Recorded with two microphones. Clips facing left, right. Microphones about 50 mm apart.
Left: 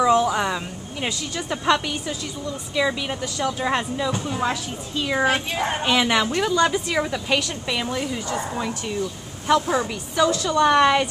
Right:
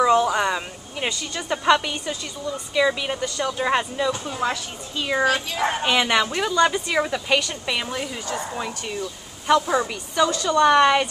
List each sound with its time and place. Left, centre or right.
0.0 s a sound: centre
1.0 s a woman's voice: centre
5.2 s speech: left
5.9 s a woman's voice: centre